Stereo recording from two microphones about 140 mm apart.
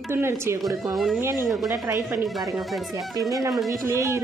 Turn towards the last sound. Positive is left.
turn(degrees=-20)  # may be behind; listen again after turning